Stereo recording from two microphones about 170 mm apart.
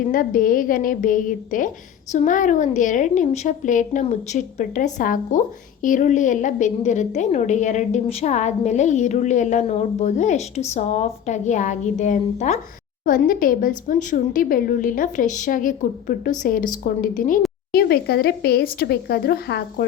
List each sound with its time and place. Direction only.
0.1 s a woman's voice: 55° left (ahead or behind)
17.7 s speech: 65° left (ahead or behind)